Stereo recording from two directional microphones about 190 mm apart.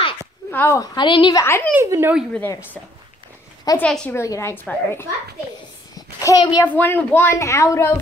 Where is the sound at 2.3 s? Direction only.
10° left (ahead or behind).